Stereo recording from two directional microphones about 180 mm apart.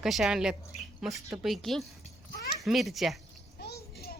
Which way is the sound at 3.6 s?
60° left (ahead or behind).